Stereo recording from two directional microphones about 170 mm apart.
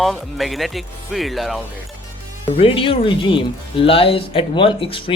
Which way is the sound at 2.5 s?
35° left (ahead or behind).